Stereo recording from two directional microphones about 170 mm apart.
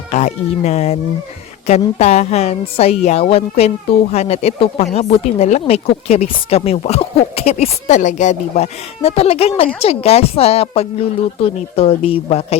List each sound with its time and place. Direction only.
0.1 s a woman's voice: 40° left (ahead or behind)